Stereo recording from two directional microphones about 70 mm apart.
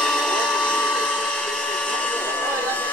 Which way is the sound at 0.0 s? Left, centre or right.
Centre.